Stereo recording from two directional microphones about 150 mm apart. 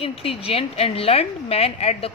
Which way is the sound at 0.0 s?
40° left (ahead or behind).